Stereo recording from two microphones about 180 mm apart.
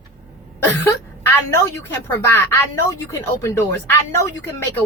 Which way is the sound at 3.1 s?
15° left (ahead or behind).